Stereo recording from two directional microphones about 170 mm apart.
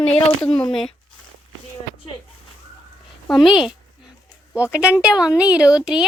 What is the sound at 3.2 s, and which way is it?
Speech, centre (ahead or behind).